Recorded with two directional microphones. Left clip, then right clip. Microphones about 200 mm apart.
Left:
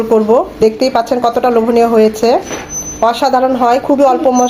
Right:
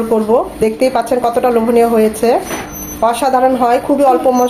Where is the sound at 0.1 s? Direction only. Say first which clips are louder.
Left 3 dB; 20° left (ahead or behind).